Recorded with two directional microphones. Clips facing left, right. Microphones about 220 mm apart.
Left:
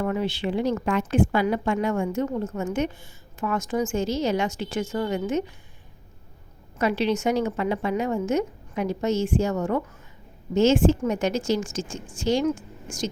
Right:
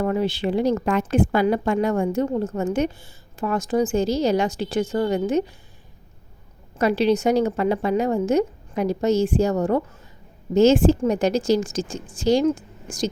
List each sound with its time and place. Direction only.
0.0 s a woman's voice: 35° right (ahead or behind)
6.7 s a woman's voice: 35° right (ahead or behind)